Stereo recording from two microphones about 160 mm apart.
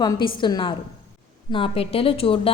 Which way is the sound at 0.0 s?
25° left (ahead or behind).